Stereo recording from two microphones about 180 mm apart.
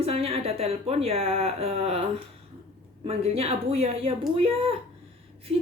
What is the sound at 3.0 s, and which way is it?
Speech, 35° right (ahead or behind).